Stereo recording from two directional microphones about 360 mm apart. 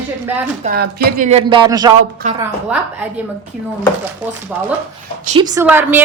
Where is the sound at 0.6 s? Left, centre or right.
Right.